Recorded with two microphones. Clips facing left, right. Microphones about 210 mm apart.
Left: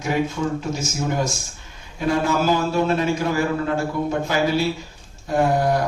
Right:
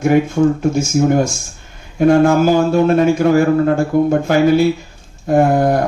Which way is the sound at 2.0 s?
50° right (ahead or behind).